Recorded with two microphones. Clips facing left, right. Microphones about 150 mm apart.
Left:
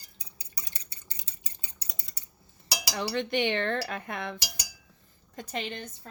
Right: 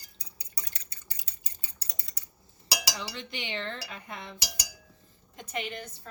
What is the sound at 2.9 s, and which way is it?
Cutlery, 60° left (ahead or behind).